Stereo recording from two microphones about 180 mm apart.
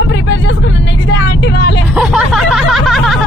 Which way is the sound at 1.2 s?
75° left (ahead or behind).